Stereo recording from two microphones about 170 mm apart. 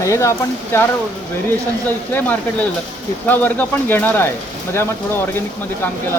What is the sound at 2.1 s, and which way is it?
Speech, 10° left (ahead or behind).